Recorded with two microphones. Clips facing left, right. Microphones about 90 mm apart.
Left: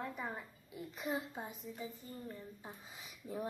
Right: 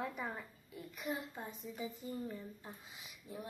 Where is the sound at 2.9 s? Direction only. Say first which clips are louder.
Left 7 dB; 40° left (ahead or behind).